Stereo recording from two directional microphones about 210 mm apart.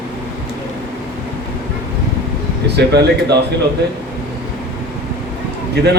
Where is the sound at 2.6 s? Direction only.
50° right (ahead or behind).